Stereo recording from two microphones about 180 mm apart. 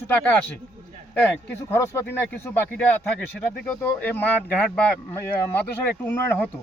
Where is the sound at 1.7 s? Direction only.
15° left (ahead or behind).